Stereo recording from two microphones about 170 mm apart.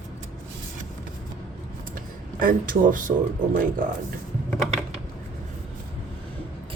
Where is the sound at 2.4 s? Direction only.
55° right (ahead or behind).